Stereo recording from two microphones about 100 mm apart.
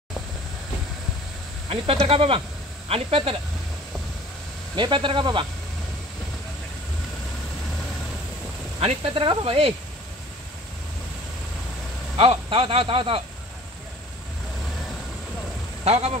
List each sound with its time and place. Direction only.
1.7 s speech: 75° right (ahead or behind)
4.7 s a man's voice: 55° right (ahead or behind)
8.7 s speech: 80° right
12.2 s a man's voice: 60° right (ahead or behind)
15.8 s speech: 90° right